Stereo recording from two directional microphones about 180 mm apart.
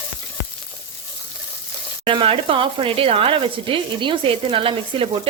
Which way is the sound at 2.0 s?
30° right (ahead or behind).